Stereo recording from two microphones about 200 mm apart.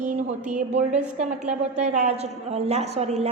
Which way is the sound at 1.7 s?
35° right (ahead or behind).